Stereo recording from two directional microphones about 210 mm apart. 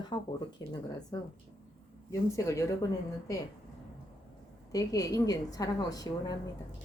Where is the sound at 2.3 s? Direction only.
15° left (ahead or behind).